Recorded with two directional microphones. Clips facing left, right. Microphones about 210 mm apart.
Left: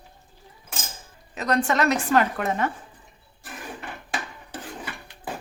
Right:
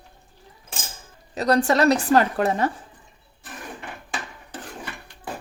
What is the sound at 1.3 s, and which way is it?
A woman's voice, 35° right (ahead or behind).